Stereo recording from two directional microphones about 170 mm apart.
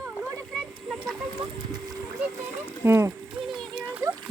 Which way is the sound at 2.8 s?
15° right (ahead or behind).